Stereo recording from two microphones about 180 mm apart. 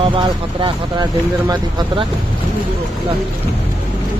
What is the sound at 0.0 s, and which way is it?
Speech, 30° right (ahead or behind).